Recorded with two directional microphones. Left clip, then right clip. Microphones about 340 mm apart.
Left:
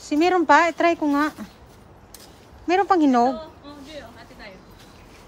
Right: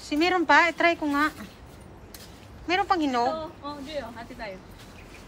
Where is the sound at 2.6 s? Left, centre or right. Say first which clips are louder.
Left 6 dB; centre.